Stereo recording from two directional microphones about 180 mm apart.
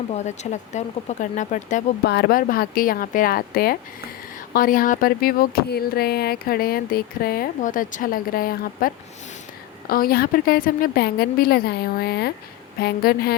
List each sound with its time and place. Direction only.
0.1 s speech: 40° left (ahead or behind)
2.0 s speech: 65° left (ahead or behind)